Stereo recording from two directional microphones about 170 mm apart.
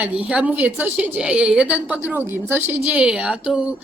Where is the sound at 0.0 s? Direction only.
5° right (ahead or behind).